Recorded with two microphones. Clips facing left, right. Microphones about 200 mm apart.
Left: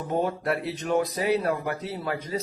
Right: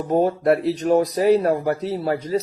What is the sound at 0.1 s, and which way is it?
Speech, 40° right (ahead or behind).